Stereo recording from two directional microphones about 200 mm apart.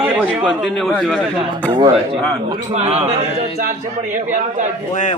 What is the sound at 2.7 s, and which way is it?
A man's voice, 35° right (ahead or behind).